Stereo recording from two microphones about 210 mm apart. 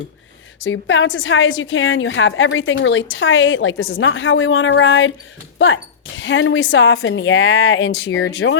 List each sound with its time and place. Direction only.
0.6 s a woman's voice: 65° left (ahead or behind)